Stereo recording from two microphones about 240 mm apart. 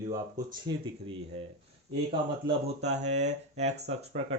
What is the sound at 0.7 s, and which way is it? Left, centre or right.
Speech, centre.